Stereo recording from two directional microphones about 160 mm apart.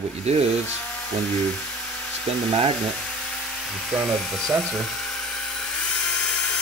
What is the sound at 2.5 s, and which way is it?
Speech, 40° right (ahead or behind).